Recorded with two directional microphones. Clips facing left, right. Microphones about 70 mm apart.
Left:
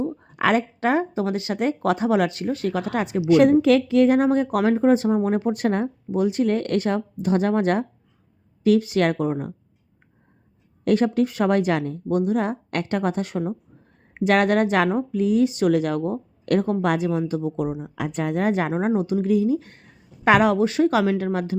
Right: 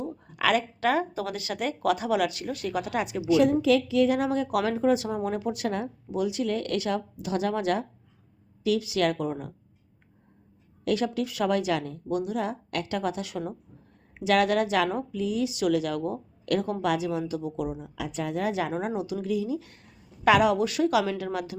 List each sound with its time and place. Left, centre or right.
0.0 s speech: left
3.2 s speech: left
10.8 s speech: left